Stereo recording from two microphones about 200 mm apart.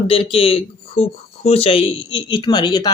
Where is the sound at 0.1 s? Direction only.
30° left (ahead or behind).